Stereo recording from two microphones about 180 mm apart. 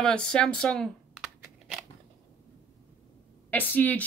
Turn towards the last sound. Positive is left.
turn(degrees=10)  # may be behind; listen again after turning